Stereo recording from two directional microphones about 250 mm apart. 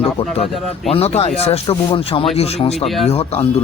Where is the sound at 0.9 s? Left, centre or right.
Left.